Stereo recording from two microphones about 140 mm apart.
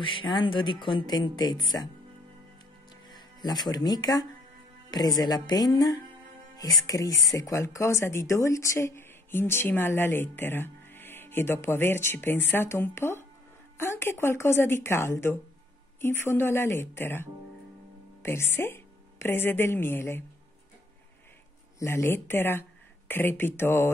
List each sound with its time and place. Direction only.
0.0 s speech: 35° left (ahead or behind)
3.3 s music: 30° left (ahead or behind)
3.7 s a woman's voice: 30° left (ahead or behind)
21.7 s speech: 20° left (ahead or behind)